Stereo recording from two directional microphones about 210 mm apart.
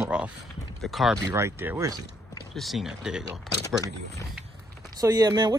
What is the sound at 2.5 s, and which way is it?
Speech, centre (ahead or behind).